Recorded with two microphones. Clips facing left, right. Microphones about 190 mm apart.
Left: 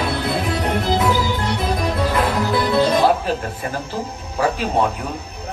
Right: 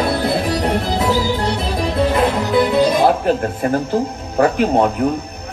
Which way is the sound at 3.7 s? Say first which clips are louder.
Right 8 dB; 55° right (ahead or behind).